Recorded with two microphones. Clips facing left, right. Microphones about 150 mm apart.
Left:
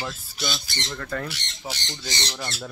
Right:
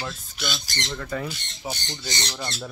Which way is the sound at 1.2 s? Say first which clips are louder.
Right 1 dB; 85° left.